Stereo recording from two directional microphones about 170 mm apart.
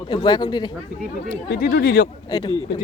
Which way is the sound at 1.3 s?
70° left (ahead or behind).